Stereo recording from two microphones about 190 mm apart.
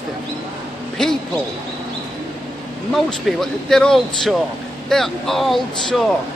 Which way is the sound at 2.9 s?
Centre (ahead or behind).